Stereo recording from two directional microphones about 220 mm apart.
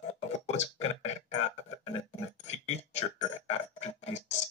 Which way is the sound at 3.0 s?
30° left (ahead or behind).